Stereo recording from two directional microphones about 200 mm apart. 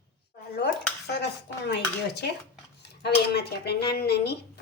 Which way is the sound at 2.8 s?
55° left (ahead or behind).